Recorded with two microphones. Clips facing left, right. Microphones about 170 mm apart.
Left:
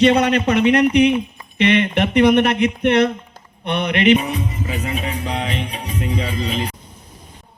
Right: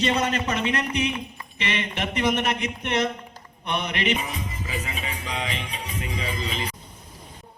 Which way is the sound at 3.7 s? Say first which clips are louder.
Left 10 dB; 65° left (ahead or behind).